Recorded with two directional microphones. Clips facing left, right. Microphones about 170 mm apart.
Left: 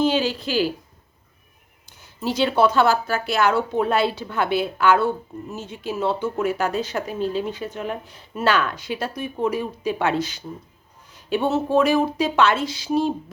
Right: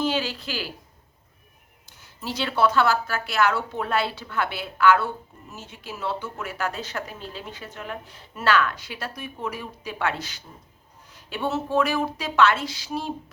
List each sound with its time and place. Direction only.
0.0 s speech: 20° left (ahead or behind)
2.0 s speech: 15° left (ahead or behind)